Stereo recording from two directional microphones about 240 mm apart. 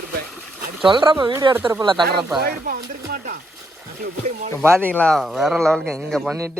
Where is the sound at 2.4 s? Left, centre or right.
Right.